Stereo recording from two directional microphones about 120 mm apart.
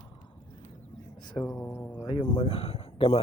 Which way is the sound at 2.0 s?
45° left (ahead or behind).